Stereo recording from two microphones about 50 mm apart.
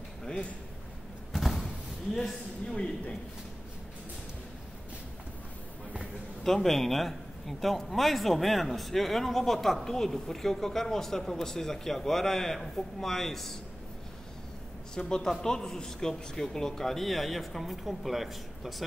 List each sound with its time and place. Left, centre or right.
0.3 s speech: left
1.3 s a sound: centre
2.6 s speech: centre
5.9 s a man's voice: centre
15.0 s a man's voice: centre